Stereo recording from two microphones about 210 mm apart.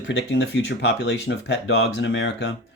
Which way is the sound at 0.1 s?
60° left (ahead or behind).